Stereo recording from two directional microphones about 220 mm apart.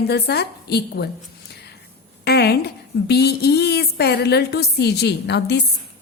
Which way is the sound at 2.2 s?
50° left (ahead or behind).